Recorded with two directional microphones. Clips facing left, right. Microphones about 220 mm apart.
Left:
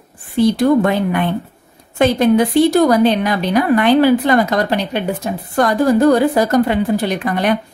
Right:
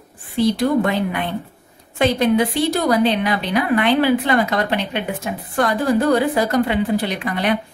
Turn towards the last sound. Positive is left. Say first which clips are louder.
# left 4 dB
turn(degrees=45)  # may be behind; listen again after turning